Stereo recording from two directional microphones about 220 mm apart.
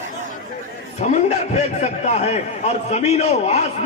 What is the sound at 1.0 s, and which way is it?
A man's voice, 30° left (ahead or behind).